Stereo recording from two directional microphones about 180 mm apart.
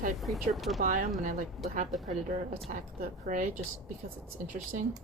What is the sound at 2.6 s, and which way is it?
A woman's voice, 45° right (ahead or behind).